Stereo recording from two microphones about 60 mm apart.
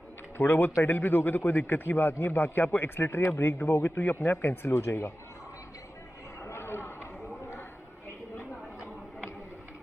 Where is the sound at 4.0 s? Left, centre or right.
Left.